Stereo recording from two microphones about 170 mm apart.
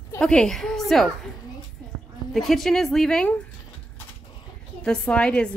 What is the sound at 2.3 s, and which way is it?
Speech, centre (ahead or behind).